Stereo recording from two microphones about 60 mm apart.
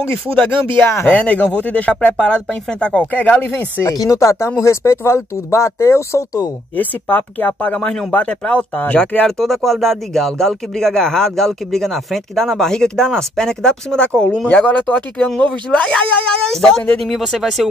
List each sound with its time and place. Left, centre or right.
1.0 s speech: left
3.1 s speech: left
3.8 s speech: left
6.8 s speech: left
9.4 s speech: centre
17.0 s speech: centre